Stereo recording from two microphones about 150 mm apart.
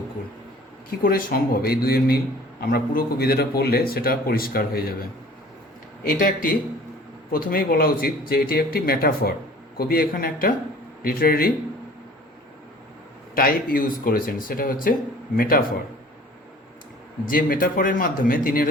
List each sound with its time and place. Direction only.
0.9 s a man's voice: 75° left (ahead or behind)
6.1 s speech: 70° left (ahead or behind)
7.3 s speech: 80° left
13.3 s speech: 70° left (ahead or behind)
17.2 s speech: 70° left (ahead or behind)